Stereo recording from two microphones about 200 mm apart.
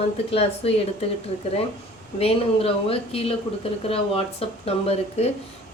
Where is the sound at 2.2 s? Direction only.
30° left (ahead or behind).